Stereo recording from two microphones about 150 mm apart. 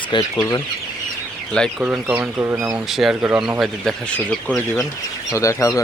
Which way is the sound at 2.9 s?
5° right (ahead or behind).